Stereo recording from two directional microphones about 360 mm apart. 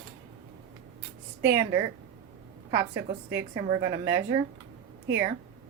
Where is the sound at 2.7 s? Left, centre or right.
Right.